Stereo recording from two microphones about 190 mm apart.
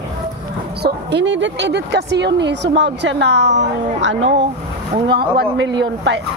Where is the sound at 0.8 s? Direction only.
65° right (ahead or behind).